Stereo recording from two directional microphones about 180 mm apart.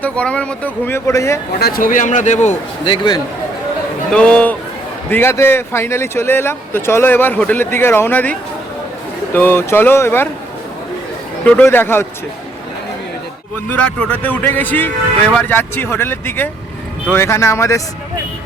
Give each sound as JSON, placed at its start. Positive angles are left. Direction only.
{"t": 0.0, "sound": "speech", "side_deg": 5}
{"t": 1.5, "sound": "a man's voice", "side_deg": 55}
{"t": 2.8, "sound": "a man's voice", "side_deg": 25}
{"t": 4.1, "sound": "speech", "side_deg": 5}
{"t": 11.4, "sound": "speech", "side_deg": 10}
{"t": 13.7, "sound": "speech", "side_deg": 10}